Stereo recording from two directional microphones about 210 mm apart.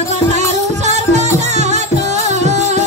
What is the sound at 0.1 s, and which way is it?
Music, 35° right (ahead or behind).